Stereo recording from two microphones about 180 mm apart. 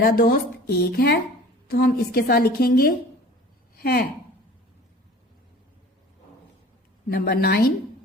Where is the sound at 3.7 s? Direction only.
60° left (ahead or behind).